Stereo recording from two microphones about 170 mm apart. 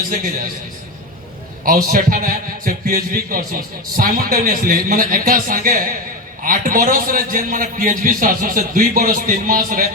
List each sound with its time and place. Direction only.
1.6 s a man's voice: 55° right (ahead or behind)